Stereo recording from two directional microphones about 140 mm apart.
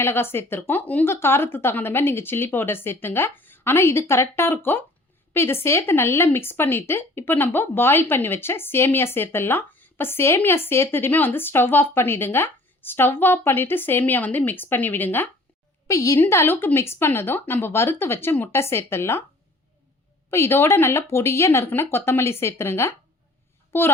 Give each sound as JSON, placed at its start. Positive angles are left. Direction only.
{"t": 0.0, "sound": "speech", "side_deg": 15}
{"t": 20.3, "sound": "speech", "side_deg": 20}